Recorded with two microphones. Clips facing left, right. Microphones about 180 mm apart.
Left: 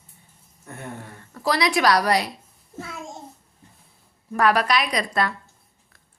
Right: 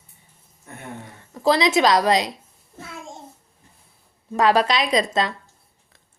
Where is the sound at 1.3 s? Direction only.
25° right (ahead or behind).